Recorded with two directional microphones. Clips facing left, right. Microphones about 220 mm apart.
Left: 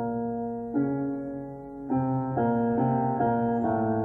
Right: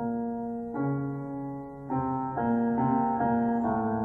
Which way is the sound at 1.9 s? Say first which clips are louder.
Left 4 dB; 30° left (ahead or behind).